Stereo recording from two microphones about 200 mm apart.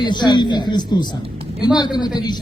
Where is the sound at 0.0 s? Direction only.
20° left (ahead or behind).